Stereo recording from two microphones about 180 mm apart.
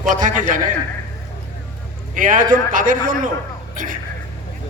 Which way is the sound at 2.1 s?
45° right (ahead or behind).